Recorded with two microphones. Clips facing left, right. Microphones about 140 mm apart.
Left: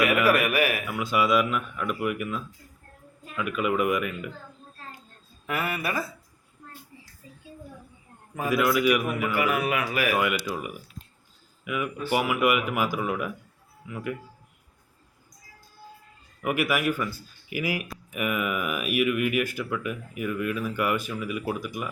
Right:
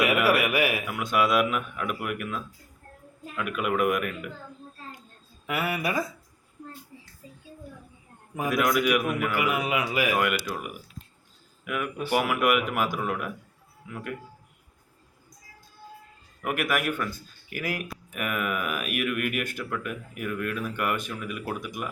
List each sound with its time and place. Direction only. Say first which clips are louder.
0.0 s a man's voice: left 1 dB; 10° right (ahead or behind)
0.9 s speech: left 1 dB; centre (ahead or behind)
5.5 s a man's voice: right 1 dB; 10° right (ahead or behind)
8.4 s speech: left 2 dB; 5° left (ahead or behind)
9.3 s a man's voice: left 1 dB; 15° right (ahead or behind)
10.2 s speech: even; centre (ahead or behind)
16.4 s speech: left 2 dB; 5° left (ahead or behind)